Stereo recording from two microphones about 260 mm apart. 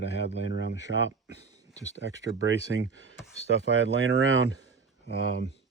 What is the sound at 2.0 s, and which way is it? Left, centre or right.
Speech, right.